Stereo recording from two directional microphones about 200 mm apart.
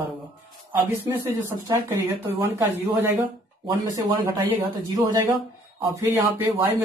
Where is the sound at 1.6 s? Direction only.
10° right (ahead or behind).